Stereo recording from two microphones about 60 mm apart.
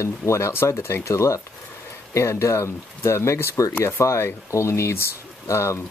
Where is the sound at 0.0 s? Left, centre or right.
Left.